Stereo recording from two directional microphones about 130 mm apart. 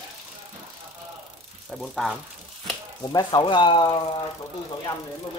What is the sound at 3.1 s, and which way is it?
Speech, 30° left (ahead or behind).